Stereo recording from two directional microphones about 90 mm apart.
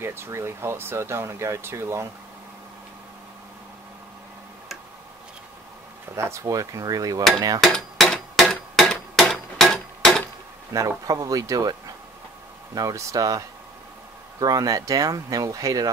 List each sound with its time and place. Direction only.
0.0 s speech: 30° right (ahead or behind)
6.1 s cutlery: 35° right (ahead or behind)
7.3 s speech: 45° right (ahead or behind)
7.6 s a sound: 5° left (ahead or behind)
10.7 s cutlery: 40° right (ahead or behind)
12.7 s cutlery: 40° right (ahead or behind)
14.4 s speech: 45° right (ahead or behind)